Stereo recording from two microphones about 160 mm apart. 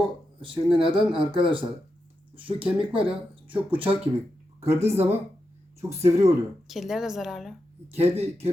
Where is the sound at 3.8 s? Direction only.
35° right (ahead or behind).